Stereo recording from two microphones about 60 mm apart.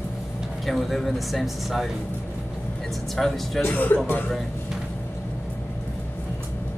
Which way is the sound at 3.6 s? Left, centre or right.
Left.